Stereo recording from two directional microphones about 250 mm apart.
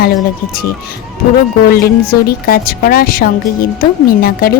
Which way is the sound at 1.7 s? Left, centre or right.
Left.